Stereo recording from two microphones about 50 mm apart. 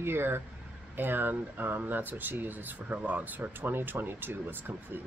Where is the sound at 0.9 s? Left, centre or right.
Right.